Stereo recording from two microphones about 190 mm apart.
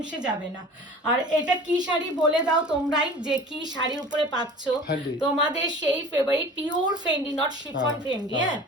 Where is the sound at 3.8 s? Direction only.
20° right (ahead or behind).